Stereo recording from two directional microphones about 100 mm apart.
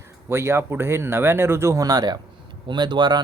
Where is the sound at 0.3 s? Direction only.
25° right (ahead or behind).